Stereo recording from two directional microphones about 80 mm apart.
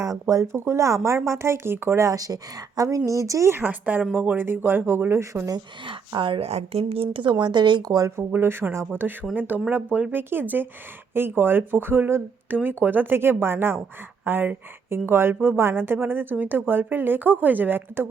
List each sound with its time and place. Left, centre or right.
0.0 s speech: right
2.0 s a woman's voice: right
6.1 s a woman's voice: right
8.3 s a woman's voice: right